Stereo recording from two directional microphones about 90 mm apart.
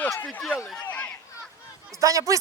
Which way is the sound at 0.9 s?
15° left (ahead or behind).